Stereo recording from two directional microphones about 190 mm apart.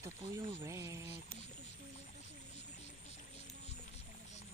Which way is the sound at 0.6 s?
15° right (ahead or behind).